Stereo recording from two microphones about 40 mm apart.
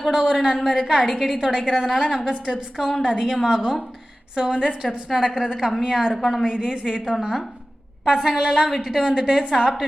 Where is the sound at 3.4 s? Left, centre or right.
Centre.